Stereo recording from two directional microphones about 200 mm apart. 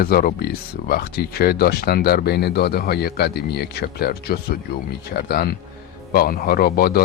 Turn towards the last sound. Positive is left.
turn(degrees=50)  # may be behind; listen again after turning